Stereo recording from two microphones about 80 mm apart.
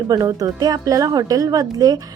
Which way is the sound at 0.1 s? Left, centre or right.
Right.